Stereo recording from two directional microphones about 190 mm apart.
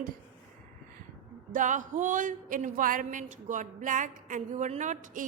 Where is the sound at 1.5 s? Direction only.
40° right (ahead or behind).